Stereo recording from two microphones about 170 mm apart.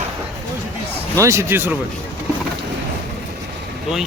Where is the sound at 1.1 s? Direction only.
15° right (ahead or behind).